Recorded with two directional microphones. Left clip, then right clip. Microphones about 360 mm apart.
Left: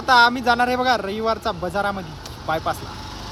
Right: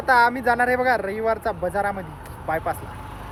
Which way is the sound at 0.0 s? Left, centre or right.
Centre.